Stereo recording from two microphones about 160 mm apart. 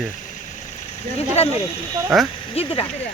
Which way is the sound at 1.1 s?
40° left (ahead or behind).